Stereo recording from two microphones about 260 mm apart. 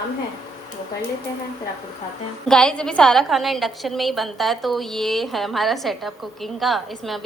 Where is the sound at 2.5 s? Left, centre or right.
Centre.